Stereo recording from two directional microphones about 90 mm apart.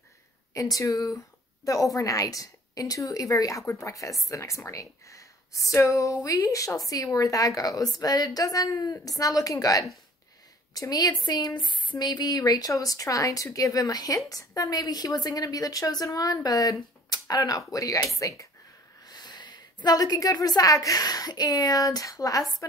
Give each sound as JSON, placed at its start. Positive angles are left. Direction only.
{"t": 0.6, "sound": "a woman's voice", "side_deg": 40}
{"t": 19.0, "sound": "a woman's voice", "side_deg": 50}